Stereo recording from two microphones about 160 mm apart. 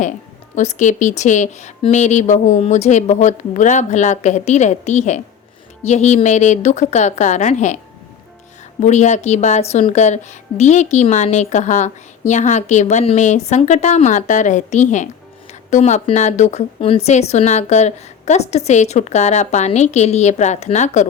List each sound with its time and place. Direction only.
0.5 s a woman's voice: 50° left (ahead or behind)
8.8 s a woman's voice: 45° left (ahead or behind)